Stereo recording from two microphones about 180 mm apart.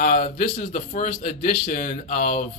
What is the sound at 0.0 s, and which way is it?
Speech, 45° left (ahead or behind).